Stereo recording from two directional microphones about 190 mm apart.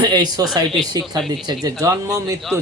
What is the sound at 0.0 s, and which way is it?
Speech, 20° right (ahead or behind).